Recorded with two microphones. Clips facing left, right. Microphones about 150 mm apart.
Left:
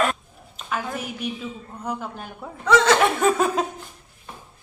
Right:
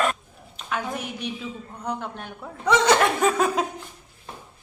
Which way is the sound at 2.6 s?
15° right (ahead or behind).